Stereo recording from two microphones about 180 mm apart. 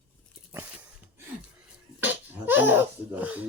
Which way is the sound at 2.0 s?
10° right (ahead or behind).